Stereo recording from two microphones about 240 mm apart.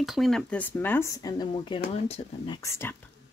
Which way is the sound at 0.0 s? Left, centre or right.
Centre.